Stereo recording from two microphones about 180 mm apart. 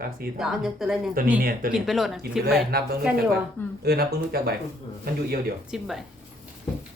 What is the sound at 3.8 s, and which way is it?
Speech, 60° right (ahead or behind).